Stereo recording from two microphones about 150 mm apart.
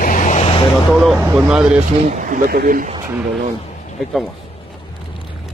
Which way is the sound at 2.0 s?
60° right (ahead or behind).